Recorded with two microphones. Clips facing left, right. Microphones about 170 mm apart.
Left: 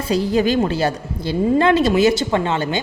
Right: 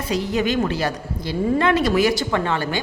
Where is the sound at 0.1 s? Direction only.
35° left (ahead or behind).